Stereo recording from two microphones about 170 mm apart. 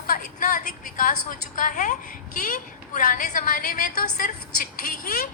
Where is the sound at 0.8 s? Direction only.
50° left (ahead or behind).